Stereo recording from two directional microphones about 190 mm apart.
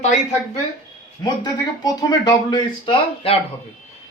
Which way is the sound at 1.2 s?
20° left (ahead or behind).